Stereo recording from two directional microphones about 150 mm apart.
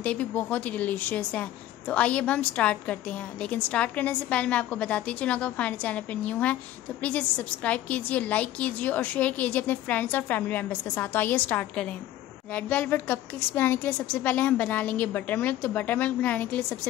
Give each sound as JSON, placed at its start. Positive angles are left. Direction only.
{"t": 0.0, "sound": "a woman's voice", "side_deg": 10}